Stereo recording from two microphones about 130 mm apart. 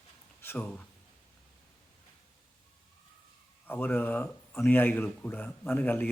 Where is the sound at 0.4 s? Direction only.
15° left (ahead or behind).